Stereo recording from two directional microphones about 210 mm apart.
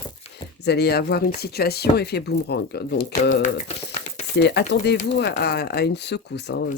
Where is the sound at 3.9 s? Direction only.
35° left (ahead or behind).